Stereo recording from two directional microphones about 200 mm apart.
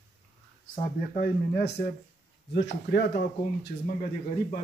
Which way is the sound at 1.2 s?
50° left (ahead or behind).